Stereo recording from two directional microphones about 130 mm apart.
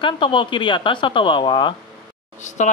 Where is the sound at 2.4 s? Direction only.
65° left (ahead or behind).